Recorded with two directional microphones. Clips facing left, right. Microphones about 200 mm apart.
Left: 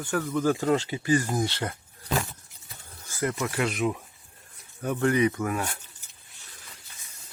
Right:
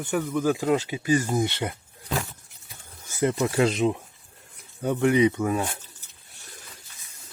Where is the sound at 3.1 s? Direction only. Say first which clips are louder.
Right 5 dB; 25° right (ahead or behind).